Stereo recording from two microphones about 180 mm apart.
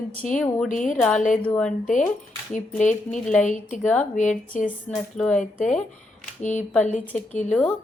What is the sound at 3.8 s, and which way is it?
Speech, 5° left (ahead or behind).